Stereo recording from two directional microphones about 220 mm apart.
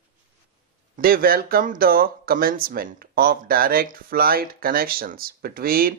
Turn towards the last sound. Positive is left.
turn(degrees=-40)  # may be behind; listen again after turning